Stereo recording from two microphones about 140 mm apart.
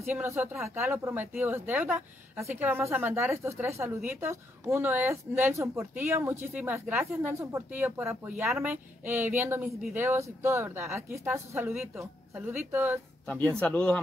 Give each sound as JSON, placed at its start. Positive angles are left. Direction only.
{"t": 0.0, "sound": "speech", "side_deg": -15}
{"t": 13.3, "sound": "speech", "side_deg": 10}